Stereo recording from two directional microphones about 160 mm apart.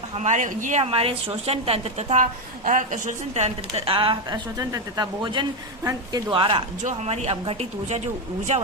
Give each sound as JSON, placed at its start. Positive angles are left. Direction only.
{"t": 0.1, "sound": "a woman's voice", "side_deg": -45}
{"t": 6.8, "sound": "speech", "side_deg": -45}